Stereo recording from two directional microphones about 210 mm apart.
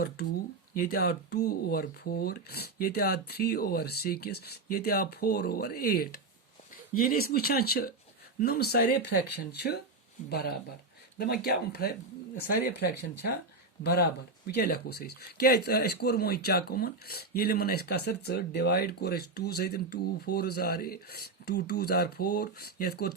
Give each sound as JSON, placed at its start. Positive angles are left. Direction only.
{"t": 0.7, "sound": "speech", "side_deg": 45}